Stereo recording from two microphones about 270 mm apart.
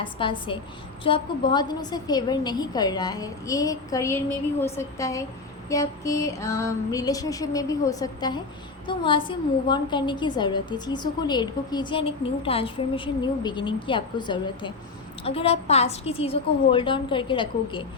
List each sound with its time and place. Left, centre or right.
0.0 s a woman's voice: centre